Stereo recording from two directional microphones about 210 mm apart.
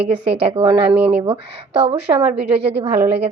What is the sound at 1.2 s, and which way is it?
A woman's voice, 25° right (ahead or behind).